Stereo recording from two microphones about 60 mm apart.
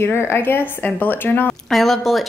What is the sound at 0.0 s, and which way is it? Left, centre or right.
Speech, left.